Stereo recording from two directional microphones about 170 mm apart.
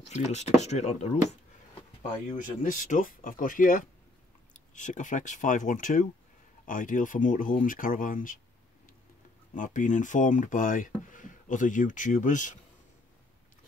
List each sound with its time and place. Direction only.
0.1 s speech: 40° left (ahead or behind)
2.2 s speech: 50° left (ahead or behind)
9.5 s speech: 50° left (ahead or behind)